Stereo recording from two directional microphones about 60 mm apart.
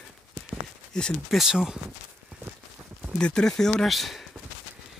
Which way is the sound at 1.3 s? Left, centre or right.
Centre.